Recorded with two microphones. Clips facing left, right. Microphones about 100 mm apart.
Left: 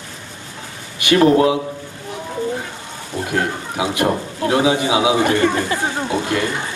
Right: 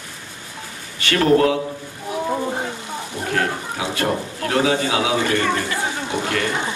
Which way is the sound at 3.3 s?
20° left (ahead or behind).